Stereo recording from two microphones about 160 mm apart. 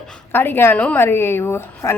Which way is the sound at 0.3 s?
15° left (ahead or behind).